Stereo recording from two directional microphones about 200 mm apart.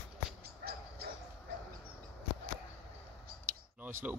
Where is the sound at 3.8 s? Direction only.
10° right (ahead or behind).